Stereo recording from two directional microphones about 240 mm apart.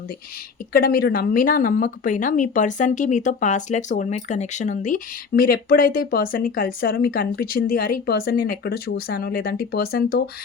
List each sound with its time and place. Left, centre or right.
0.7 s speech: left